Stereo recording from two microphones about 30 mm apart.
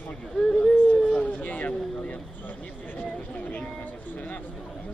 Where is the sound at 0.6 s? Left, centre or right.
Left.